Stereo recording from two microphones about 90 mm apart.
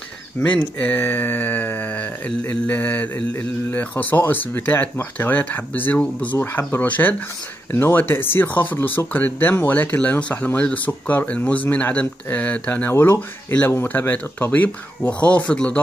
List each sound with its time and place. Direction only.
0.4 s speech: 20° left (ahead or behind)